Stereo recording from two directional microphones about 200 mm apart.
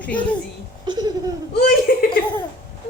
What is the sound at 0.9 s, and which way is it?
Laughter, 20° right (ahead or behind).